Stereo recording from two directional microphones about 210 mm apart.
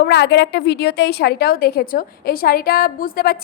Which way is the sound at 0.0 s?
55° left (ahead or behind).